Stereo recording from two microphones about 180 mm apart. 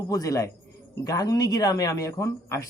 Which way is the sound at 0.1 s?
20° left (ahead or behind).